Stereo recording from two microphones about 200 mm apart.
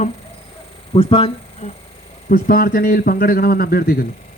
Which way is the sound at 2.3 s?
45° left (ahead or behind).